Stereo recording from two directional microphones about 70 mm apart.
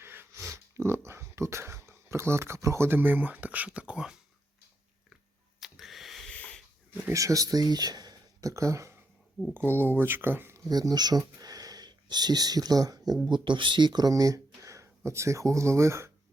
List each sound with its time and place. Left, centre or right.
0.0 s a sound: right
0.3 s speech: right; by 4.2 s centre
5.5 s a sound: centre
6.3 s wheeze: centre
7.1 s speech: right
8.4 s speech: right
9.6 s speech: right
10.6 s speech: right
11.3 s a sound: right
13.2 s speech: right
14.1 s speech: right